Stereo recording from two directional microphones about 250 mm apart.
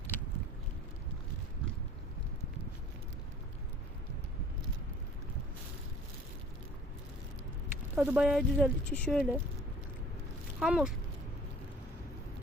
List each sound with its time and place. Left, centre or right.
7.9 s speech: centre
10.6 s speech: centre